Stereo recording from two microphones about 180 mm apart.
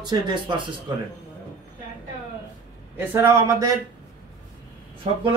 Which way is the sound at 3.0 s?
10° right (ahead or behind).